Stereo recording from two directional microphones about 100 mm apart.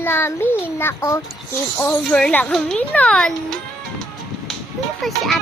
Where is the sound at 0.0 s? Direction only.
25° left (ahead or behind).